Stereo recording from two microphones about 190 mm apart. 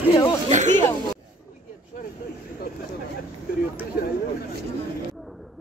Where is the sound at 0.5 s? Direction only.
40° right (ahead or behind).